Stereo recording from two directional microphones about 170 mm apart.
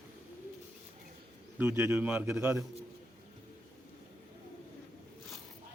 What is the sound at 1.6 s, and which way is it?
Speech, 15° right (ahead or behind).